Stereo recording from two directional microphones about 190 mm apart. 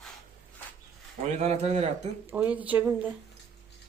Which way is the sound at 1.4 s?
35° right (ahead or behind).